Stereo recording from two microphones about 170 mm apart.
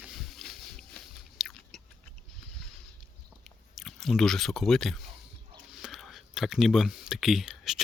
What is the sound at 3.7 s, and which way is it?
Speech, centre (ahead or behind).